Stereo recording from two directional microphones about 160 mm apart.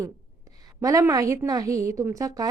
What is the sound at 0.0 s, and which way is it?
A woman's voice, 20° right (ahead or behind).